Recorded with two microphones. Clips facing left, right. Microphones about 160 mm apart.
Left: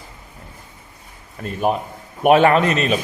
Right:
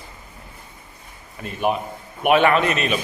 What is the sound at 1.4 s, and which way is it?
A man's voice, 40° left (ahead or behind).